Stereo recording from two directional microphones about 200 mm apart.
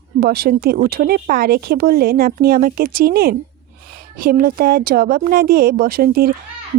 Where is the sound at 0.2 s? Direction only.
50° right (ahead or behind).